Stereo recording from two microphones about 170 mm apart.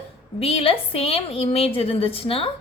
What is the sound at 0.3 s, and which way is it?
A woman's voice, 35° left (ahead or behind).